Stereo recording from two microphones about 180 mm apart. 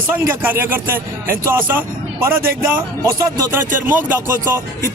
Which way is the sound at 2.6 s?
20° right (ahead or behind).